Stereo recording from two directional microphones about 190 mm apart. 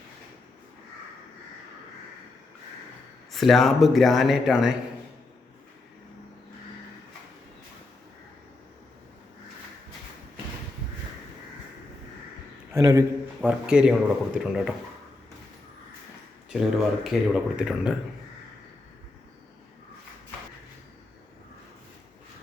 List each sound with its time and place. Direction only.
3.3 s speech: centre (ahead or behind)
12.7 s a sound: 15° right (ahead or behind)
13.5 s speech: 5° right (ahead or behind)
16.5 s speech: 5° right (ahead or behind)